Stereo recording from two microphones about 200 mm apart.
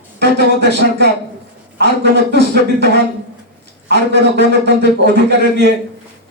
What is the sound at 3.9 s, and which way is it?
A man's voice, 55° right (ahead or behind).